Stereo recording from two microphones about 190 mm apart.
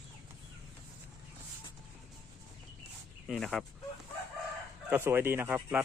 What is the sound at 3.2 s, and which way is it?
Speech, centre (ahead or behind).